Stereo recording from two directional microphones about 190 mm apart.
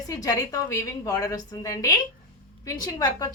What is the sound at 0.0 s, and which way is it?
A woman's voice, 20° left (ahead or behind).